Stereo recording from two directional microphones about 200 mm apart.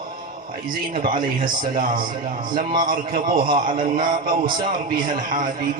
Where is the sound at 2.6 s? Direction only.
45° right (ahead or behind).